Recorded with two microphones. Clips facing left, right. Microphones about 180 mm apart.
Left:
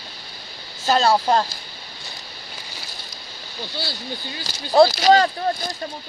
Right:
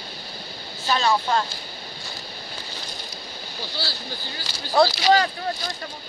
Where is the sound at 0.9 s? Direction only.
40° left (ahead or behind).